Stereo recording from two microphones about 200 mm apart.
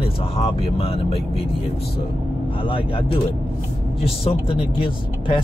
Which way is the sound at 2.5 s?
25° left (ahead or behind).